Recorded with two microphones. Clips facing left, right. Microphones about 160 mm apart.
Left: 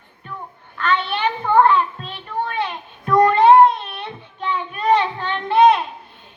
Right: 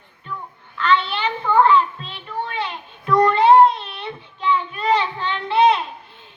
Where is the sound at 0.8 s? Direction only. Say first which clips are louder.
Right 1 dB; 50° left (ahead or behind).